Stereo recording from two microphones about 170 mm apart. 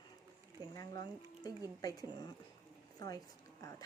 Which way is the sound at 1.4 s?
20° left (ahead or behind).